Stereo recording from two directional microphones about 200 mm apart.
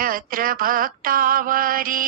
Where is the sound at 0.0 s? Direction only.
45° right (ahead or behind).